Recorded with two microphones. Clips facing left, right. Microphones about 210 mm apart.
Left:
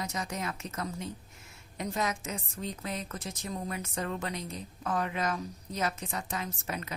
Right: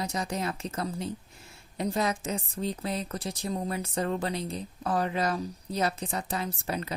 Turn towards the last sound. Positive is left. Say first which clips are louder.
# right 5 dB
turn(degrees=-35)  # may be behind; listen again after turning